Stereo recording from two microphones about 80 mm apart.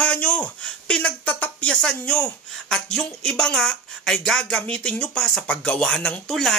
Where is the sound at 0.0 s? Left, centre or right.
Centre.